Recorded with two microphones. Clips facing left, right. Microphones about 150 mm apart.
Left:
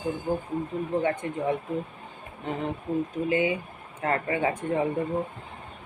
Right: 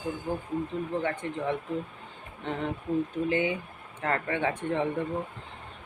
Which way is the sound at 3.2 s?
10° left (ahead or behind).